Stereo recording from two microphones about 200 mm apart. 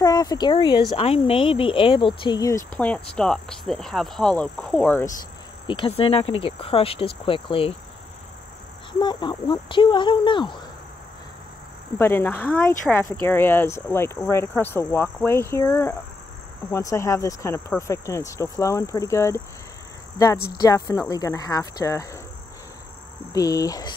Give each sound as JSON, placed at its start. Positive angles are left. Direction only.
{"t": 0.0, "sound": "speech", "side_deg": 20}
{"t": 2.7, "sound": "speech", "side_deg": 5}
{"t": 5.7, "sound": "speech", "side_deg": 25}
{"t": 9.0, "sound": "speech", "side_deg": 20}
{"t": 12.0, "sound": "speech", "side_deg": 10}
{"t": 20.5, "sound": "speech", "side_deg": 15}
{"t": 23.3, "sound": "speech", "side_deg": 20}